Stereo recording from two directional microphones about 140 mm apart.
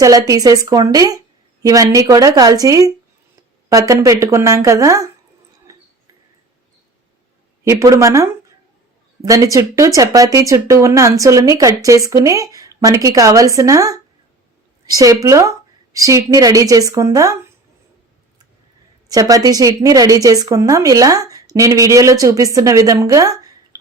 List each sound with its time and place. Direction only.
0.0 s speech: 25° right (ahead or behind)
5.7 s a sound: 25° right (ahead or behind)
7.6 s speech: 20° right (ahead or behind)
19.0 s speech: 25° right (ahead or behind)